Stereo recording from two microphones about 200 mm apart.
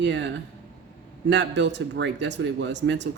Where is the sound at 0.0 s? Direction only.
60° right (ahead or behind).